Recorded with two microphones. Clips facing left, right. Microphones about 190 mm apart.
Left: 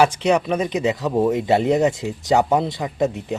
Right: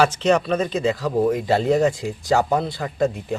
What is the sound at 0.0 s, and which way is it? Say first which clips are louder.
Speech: left 1 dB; 10° left (ahead or behind).